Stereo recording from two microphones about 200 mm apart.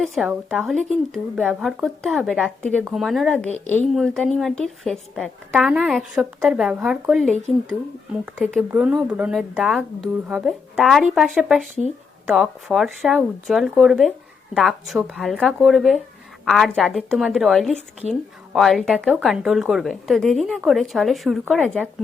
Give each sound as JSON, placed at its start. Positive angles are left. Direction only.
{"t": 0.0, "sound": "a woman's voice", "side_deg": 0}
{"t": 8.4, "sound": "a woman's voice", "side_deg": -5}